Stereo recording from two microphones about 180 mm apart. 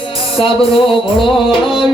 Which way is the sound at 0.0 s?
30° left (ahead or behind).